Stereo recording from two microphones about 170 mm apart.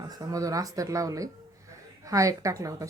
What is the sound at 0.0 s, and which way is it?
Speech, 20° right (ahead or behind).